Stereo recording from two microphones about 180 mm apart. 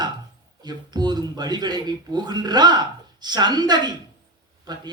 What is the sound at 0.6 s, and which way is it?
Speech, 20° right (ahead or behind).